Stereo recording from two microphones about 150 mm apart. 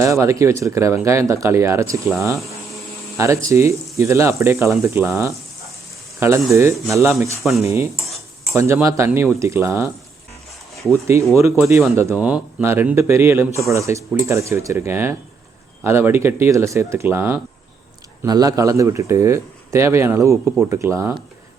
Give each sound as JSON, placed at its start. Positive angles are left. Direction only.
{"t": 0.0, "sound": "speech", "side_deg": -20}
{"t": 3.2, "sound": "speech", "side_deg": -20}
{"t": 10.9, "sound": "speech", "side_deg": -20}
{"t": 12.1, "sound": "speech", "side_deg": -10}
{"t": 18.2, "sound": "speech", "side_deg": -25}